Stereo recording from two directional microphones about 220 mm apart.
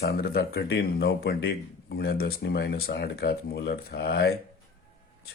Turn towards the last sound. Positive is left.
turn(degrees=45)  # may be behind; listen again after turning